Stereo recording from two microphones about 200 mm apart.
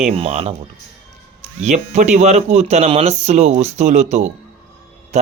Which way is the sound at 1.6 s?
35° right (ahead or behind).